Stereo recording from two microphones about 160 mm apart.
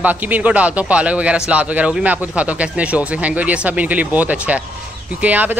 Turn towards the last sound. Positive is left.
turn(degrees=-10)  # may be behind; listen again after turning